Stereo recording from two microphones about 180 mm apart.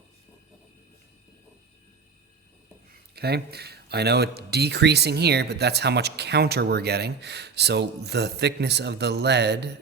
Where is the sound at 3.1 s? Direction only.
60° right (ahead or behind).